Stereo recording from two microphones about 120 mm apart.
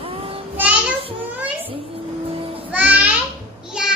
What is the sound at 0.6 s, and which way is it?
Child singing, 10° right (ahead or behind).